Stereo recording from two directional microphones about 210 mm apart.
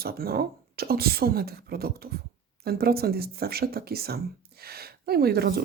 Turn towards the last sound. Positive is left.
turn(degrees=-45)  # may be behind; listen again after turning